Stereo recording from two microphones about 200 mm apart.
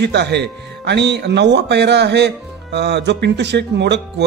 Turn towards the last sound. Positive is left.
turn(degrees=-60)  # may be behind; listen again after turning